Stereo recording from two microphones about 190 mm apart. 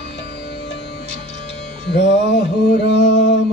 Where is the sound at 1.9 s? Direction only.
65° left (ahead or behind).